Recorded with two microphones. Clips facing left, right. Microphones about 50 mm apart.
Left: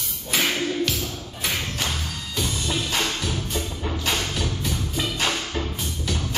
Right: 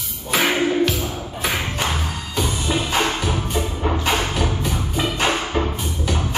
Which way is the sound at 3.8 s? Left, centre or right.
Right.